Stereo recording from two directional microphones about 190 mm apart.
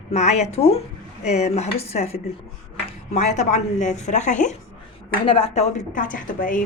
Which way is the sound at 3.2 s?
35° left (ahead or behind).